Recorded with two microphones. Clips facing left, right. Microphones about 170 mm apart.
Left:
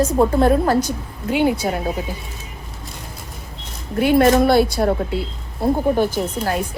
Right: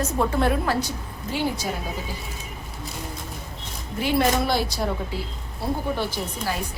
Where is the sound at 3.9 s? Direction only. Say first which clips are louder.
Left 8 dB; 55° left (ahead or behind).